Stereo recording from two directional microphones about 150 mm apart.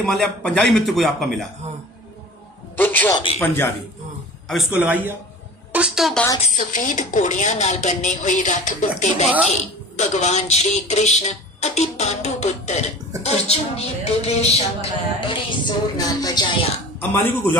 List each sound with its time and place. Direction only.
0.0 s a man's voice: 5° left (ahead or behind)
2.7 s a man's voice: 10° left (ahead or behind)
4.5 s a woman's voice: centre (ahead or behind)
6.5 s a woman's voice: 60° left (ahead or behind); by 16.6 s 25° left (ahead or behind)
17.1 s a man's voice: 15° left (ahead or behind)